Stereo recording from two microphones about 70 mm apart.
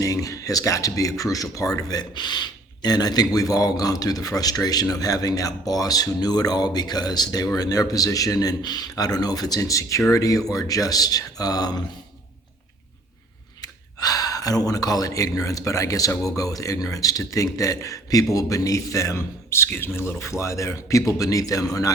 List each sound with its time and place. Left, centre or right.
0.0 s a man's voice: left
13.6 s a man's voice: left